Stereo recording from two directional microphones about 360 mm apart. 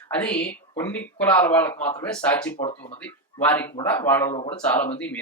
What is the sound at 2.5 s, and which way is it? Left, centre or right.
Speech, centre.